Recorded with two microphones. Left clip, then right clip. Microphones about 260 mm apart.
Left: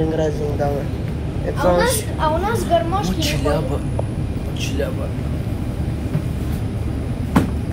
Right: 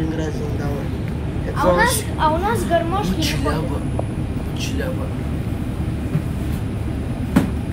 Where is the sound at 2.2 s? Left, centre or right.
Right.